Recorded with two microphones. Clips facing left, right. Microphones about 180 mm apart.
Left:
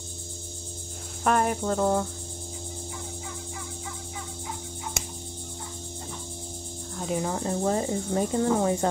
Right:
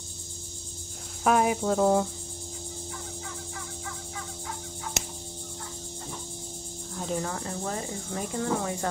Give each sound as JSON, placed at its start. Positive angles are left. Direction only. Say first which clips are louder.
{"t": 1.2, "sound": "cricket", "louder": "right 1 dB", "side_deg": -5}
{"t": 6.9, "sound": "cricket", "louder": "left 2 dB", "side_deg": 0}
{"t": 7.2, "sound": "cricket", "louder": "left 5 dB", "side_deg": 20}